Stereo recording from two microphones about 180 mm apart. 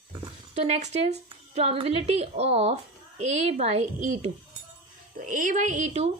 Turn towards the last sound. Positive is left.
turn(degrees=-40)  # may be behind; listen again after turning